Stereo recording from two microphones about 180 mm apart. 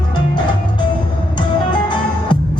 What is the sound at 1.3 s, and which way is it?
Music, 25° left (ahead or behind).